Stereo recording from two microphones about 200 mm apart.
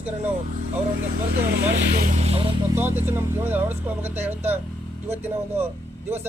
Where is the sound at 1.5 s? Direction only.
50° right (ahead or behind).